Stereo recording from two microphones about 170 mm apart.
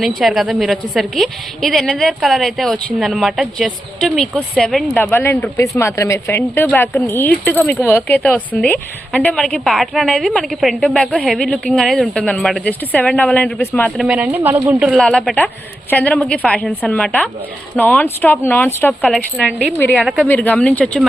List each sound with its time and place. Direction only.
0.0 s a woman's voice: centre (ahead or behind)